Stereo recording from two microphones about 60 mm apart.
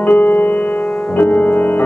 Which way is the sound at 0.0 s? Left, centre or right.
Left.